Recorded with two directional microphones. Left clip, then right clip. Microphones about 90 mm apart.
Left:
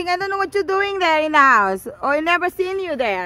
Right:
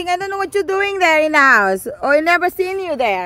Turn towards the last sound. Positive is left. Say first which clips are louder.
# right 3 dB
turn(degrees=0)  # may be behind; listen again after turning